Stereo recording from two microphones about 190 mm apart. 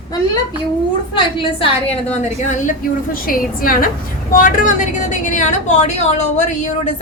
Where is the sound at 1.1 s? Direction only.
30° left (ahead or behind).